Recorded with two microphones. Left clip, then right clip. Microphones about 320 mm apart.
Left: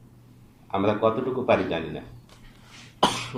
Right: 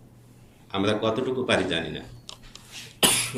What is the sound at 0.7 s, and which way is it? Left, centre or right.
Speech, centre.